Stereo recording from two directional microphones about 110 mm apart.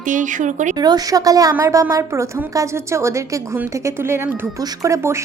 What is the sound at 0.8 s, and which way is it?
Speech, 35° right (ahead or behind).